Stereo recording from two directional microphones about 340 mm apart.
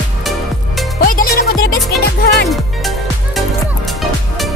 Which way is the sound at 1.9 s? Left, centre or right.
Centre.